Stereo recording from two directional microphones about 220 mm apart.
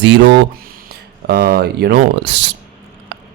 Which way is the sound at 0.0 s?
55° right (ahead or behind).